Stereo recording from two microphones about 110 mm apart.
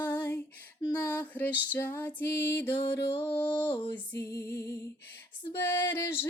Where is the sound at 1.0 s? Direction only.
15° left (ahead or behind).